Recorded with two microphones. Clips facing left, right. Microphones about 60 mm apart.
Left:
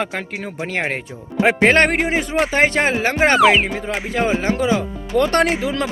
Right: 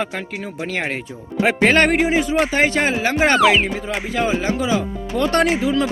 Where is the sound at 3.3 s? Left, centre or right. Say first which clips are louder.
Left 2 dB; centre.